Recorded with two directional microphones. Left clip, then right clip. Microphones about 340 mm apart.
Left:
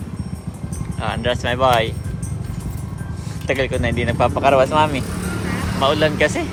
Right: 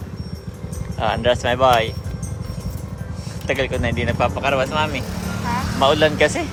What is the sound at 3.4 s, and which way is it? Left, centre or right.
Speech, centre.